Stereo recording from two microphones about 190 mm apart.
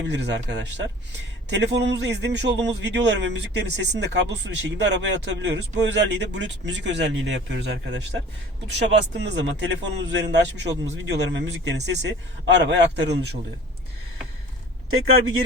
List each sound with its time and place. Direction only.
0.1 s a man's voice: 65° right (ahead or behind)